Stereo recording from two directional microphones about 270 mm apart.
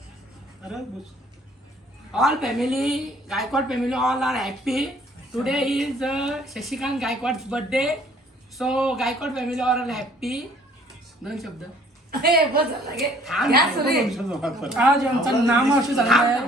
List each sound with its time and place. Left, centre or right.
2.1 s a woman's voice: centre
12.2 s a woman's voice: right
13.0 s a woman's voice: centre
13.5 s a woman's voice: right
13.9 s a woman's voice: centre